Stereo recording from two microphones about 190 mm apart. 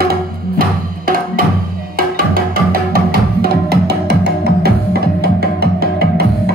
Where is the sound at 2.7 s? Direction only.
50° right (ahead or behind).